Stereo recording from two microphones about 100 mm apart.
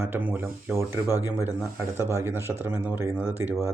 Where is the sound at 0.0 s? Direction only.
20° right (ahead or behind).